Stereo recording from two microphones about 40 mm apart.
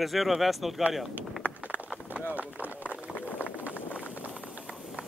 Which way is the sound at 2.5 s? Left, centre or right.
Left.